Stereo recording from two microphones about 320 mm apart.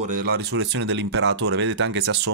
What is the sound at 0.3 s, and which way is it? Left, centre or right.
Speech, right.